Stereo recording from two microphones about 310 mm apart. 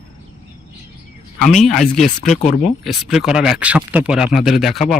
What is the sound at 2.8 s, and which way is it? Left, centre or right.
Speech, centre.